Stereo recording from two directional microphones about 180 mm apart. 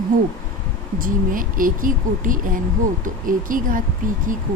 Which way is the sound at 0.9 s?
50° right (ahead or behind).